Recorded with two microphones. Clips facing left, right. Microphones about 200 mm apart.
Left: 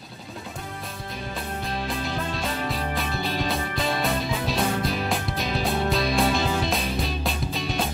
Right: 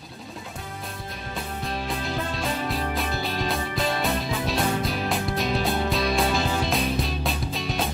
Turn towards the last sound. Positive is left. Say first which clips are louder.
# left 1 dB
turn(degrees=0)  # may be behind; listen again after turning